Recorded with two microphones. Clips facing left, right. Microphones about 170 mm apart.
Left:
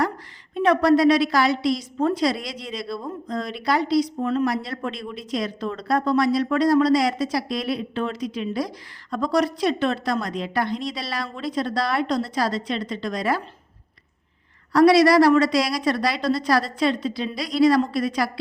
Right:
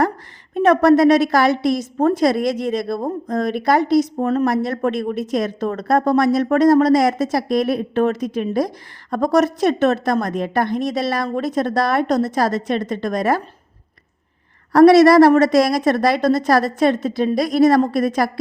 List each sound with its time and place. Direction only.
0.5 s speech: 45° right (ahead or behind)
14.7 s speech: 50° right (ahead or behind)